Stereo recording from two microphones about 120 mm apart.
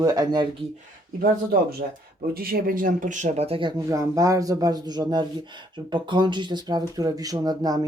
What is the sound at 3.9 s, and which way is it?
Speech, 25° right (ahead or behind).